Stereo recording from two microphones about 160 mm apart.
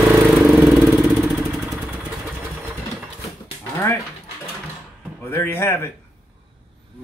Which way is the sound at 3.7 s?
15° left (ahead or behind).